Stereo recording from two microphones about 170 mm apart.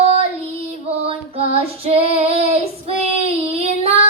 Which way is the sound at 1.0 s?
35° right (ahead or behind).